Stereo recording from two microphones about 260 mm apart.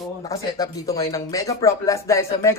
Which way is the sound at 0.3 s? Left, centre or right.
Centre.